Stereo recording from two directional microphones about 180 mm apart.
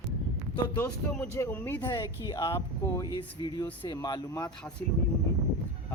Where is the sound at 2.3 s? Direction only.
25° left (ahead or behind).